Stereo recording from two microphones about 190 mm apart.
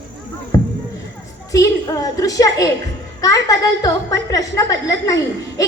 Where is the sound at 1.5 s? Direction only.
15° left (ahead or behind).